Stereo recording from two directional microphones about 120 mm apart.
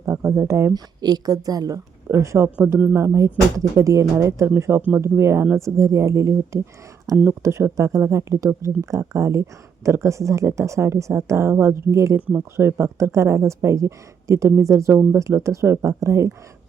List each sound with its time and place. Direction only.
0.0 s speech: 25° right (ahead or behind)
0.7 s speech: 35° right (ahead or behind)
2.6 s speech: 10° right (ahead or behind)
2.9 s speech: 25° right (ahead or behind)